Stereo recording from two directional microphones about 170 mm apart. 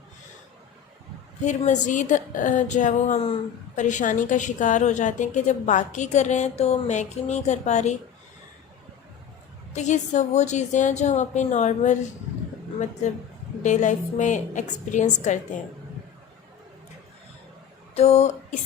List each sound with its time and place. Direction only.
1.5 s a woman's voice: 45° left (ahead or behind)
9.7 s a woman's voice: 45° left (ahead or behind)
13.6 s a woman's voice: 45° left (ahead or behind)
17.9 s a sound: 40° left (ahead or behind)